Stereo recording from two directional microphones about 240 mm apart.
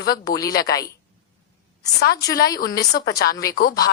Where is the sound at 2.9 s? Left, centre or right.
Left.